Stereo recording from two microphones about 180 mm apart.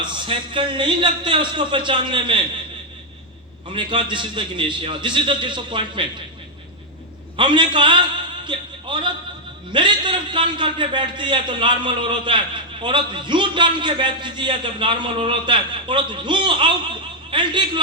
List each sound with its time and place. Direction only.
0.0 s a man's voice: 25° right (ahead or behind)
3.7 s a man's voice: 25° right (ahead or behind)
7.3 s a man's voice: 25° right (ahead or behind)
8.4 s a sound: 25° right (ahead or behind)
9.7 s a man's voice: 25° right (ahead or behind)